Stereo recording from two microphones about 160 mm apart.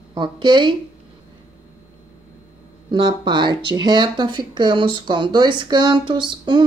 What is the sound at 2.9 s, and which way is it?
Speech, 30° right (ahead or behind).